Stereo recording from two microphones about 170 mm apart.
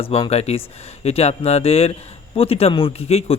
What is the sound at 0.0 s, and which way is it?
A man's voice, 35° left (ahead or behind).